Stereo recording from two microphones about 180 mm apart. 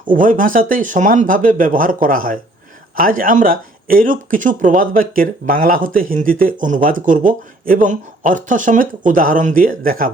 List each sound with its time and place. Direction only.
0.1 s speech: 50° right (ahead or behind)